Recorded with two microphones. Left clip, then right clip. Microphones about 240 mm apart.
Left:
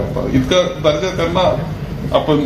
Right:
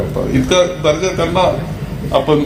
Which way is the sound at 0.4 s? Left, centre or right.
Right.